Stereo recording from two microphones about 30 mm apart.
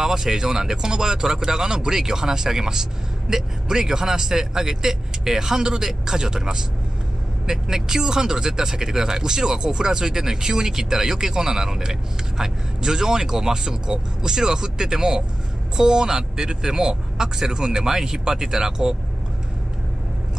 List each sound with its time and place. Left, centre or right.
0.0 s speech: right